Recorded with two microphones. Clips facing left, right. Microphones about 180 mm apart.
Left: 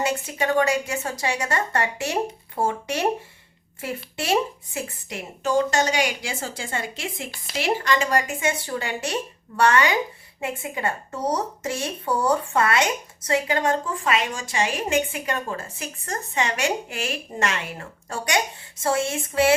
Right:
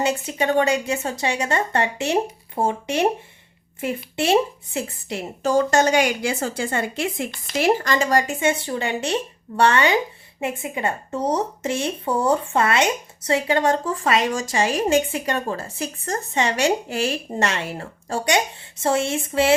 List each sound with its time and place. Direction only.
0.0 s a woman's voice: 25° right (ahead or behind); by 7.3 s 55° right (ahead or behind)
7.6 s a woman's voice: 40° right (ahead or behind); by 19.5 s 25° right (ahead or behind)